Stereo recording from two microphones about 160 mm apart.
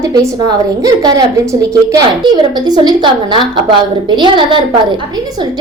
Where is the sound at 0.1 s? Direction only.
25° right (ahead or behind).